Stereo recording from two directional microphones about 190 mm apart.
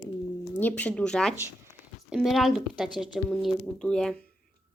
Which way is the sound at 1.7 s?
5° right (ahead or behind).